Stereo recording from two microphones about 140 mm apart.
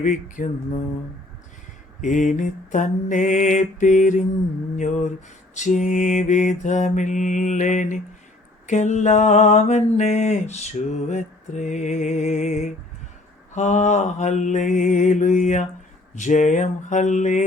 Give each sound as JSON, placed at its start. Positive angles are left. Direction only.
{"t": 0.0, "sound": "mantra", "side_deg": 65}
{"t": 2.0, "sound": "mantra", "side_deg": 65}